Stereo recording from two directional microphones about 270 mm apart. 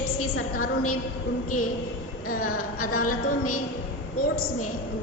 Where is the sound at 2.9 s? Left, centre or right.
Left.